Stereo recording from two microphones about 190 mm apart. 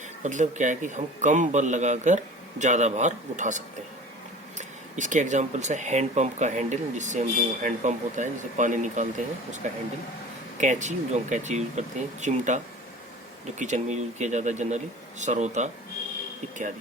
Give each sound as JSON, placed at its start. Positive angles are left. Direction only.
{"t": 0.2, "sound": "speech", "side_deg": -40}
{"t": 10.6, "sound": "speech", "side_deg": -40}
{"t": 13.6, "sound": "speech", "side_deg": -40}